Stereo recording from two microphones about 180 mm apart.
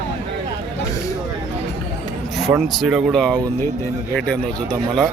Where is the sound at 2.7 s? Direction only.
Centre (ahead or behind).